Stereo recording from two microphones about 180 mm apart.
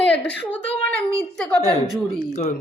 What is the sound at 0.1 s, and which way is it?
Speech, 75° left (ahead or behind).